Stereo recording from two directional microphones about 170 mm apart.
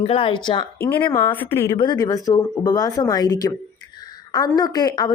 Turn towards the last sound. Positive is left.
turn(degrees=20)  # may be behind; listen again after turning